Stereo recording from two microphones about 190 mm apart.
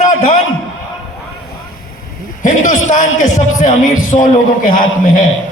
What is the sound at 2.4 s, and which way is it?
A man's voice, 40° left (ahead or behind).